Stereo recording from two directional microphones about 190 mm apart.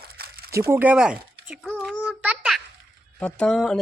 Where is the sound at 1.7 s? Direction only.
Centre (ahead or behind).